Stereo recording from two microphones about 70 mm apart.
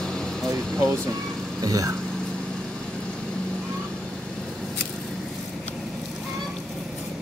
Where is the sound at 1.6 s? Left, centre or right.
Right.